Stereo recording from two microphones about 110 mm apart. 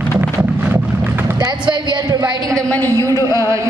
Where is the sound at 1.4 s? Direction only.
45° right (ahead or behind).